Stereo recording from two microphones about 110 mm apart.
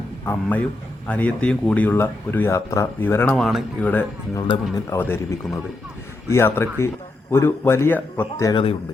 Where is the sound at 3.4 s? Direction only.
5° right (ahead or behind).